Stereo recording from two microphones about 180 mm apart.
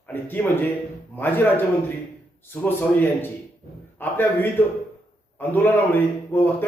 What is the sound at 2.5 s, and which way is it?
A man's voice, 10° left (ahead or behind).